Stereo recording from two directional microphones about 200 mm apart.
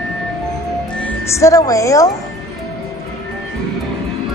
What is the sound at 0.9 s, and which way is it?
Speech, 10° left (ahead or behind).